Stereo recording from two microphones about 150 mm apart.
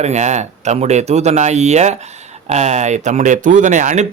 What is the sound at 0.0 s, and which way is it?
Speech, 50° right (ahead or behind).